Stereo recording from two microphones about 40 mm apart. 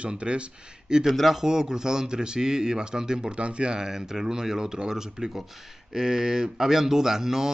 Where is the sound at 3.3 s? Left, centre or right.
Right.